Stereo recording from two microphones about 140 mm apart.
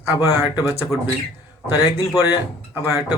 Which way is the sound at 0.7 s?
20° right (ahead or behind).